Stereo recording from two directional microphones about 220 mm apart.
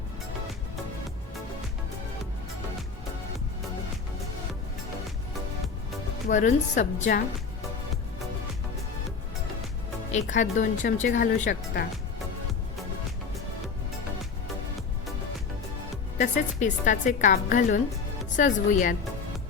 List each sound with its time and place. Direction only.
6.2 s speech: 35° left (ahead or behind)
10.1 s speech: 35° left (ahead or behind)
16.1 s speech: 35° left (ahead or behind)